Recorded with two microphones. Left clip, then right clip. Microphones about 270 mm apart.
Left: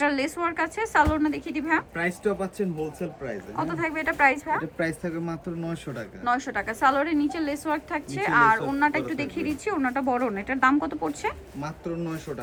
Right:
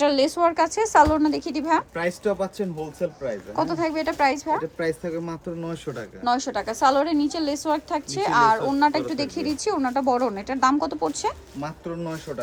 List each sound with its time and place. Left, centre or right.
0.0 s a woman's voice: centre
2.0 s speech: centre
3.5 s a woman's voice: centre
4.9 s speech: centre
6.2 s a woman's voice: centre
11.6 s speech: centre